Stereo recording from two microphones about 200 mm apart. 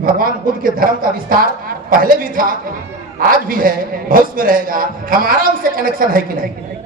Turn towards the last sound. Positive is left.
turn(degrees=-45)  # may be behind; listen again after turning